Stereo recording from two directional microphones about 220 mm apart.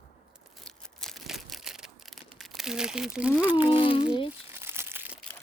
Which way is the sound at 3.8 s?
20° left (ahead or behind).